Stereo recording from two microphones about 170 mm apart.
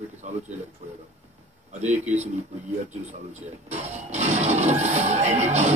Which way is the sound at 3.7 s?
40° right (ahead or behind).